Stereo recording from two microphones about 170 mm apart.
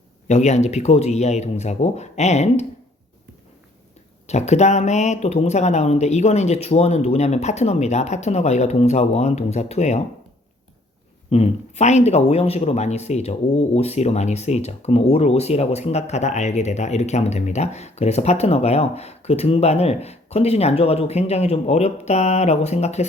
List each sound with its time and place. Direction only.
0.3 s speech: 40° left (ahead or behind)
4.3 s speech: 40° left (ahead or behind)
11.3 s speech: 40° left (ahead or behind)